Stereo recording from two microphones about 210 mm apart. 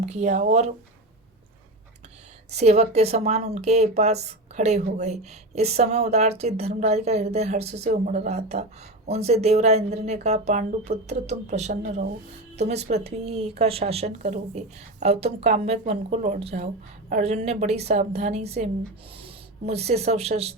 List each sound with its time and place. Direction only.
0.0 s speech: 35° right (ahead or behind)
2.5 s speech: 30° right (ahead or behind)